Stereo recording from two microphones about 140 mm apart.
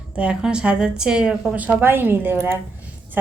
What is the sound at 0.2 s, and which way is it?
A woman's voice, 5° right (ahead or behind).